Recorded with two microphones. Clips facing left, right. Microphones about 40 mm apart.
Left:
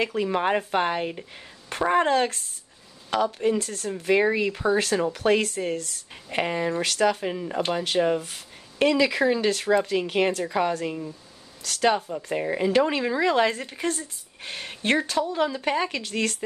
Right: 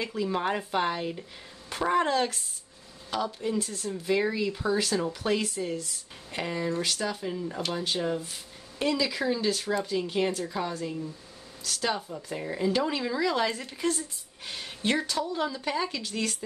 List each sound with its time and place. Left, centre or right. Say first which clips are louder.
0.0 s speech: left 5 dB; left
0.3 s speech: left 5 dB; left
6.3 s speech: left 5 dB; left
6.8 s speech: left 7 dB; left